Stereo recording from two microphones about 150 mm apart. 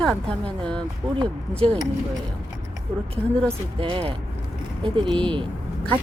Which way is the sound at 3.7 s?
35° right (ahead or behind).